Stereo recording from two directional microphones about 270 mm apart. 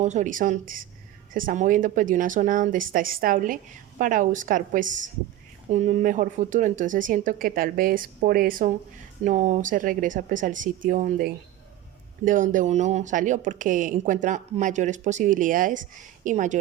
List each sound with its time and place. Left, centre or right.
0.0 s speech: right